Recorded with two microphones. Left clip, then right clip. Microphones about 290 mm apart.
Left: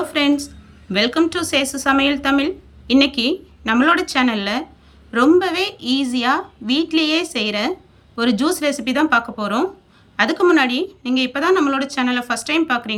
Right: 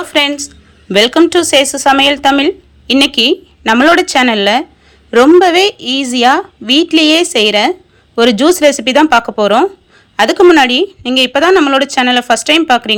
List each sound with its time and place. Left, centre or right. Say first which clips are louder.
0.0 s a woman's voice: right 6 dB; centre